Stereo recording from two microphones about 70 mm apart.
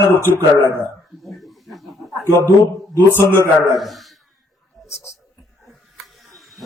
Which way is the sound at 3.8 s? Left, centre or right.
Centre.